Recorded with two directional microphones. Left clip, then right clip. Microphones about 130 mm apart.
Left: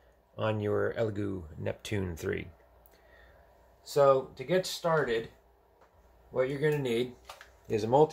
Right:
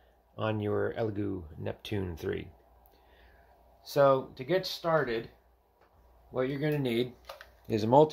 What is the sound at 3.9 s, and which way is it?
Speech, 90° right.